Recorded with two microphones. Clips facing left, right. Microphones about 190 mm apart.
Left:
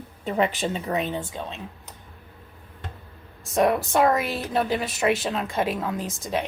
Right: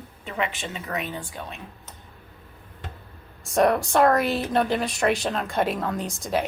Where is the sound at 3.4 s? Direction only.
Centre (ahead or behind).